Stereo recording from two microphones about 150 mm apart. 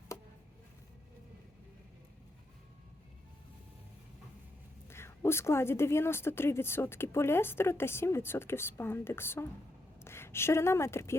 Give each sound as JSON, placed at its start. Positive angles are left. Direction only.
{"t": 4.9, "sound": "a woman's voice", "side_deg": 15}